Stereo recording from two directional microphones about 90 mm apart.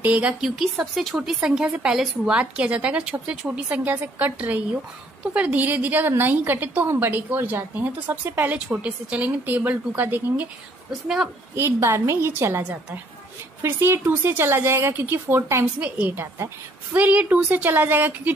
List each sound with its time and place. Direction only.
0.0 s a woman's voice: 15° right (ahead or behind)
8.5 s a woman's voice: 10° right (ahead or behind)
10.9 s a woman's voice: 5° right (ahead or behind)
11.5 s a woman's voice: 30° right (ahead or behind)